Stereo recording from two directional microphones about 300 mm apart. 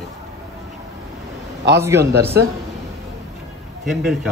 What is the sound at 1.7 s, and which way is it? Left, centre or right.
Speech, centre.